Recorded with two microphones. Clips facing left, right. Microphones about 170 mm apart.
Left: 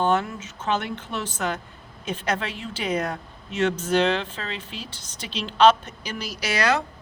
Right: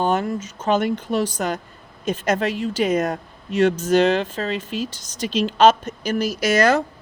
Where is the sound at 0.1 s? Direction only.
40° right (ahead or behind).